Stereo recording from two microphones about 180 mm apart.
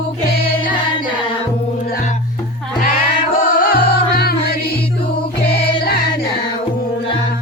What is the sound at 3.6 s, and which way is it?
Music, 60° left (ahead or behind).